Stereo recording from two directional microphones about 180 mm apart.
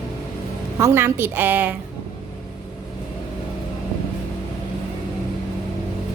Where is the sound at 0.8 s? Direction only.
15° right (ahead or behind).